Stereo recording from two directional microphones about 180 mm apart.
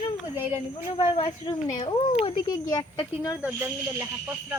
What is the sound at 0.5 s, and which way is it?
Speech, 30° left (ahead or behind).